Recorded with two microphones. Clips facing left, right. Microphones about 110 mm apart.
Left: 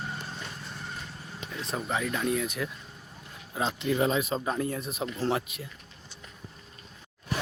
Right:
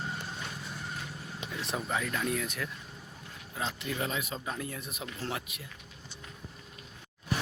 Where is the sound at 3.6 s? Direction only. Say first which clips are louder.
Left 8 dB; 20° left (ahead or behind).